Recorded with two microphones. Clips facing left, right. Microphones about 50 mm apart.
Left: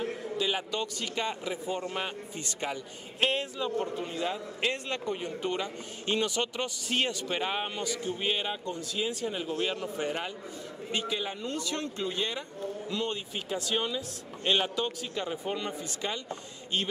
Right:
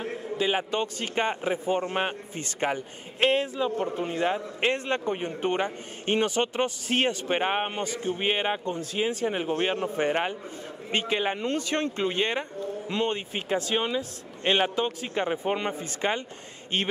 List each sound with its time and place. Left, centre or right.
0.0 s a man's voice: right
3.9 s a man's voice: right